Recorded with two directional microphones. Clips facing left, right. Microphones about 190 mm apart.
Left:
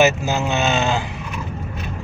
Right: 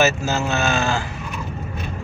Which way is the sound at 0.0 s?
15° left (ahead or behind).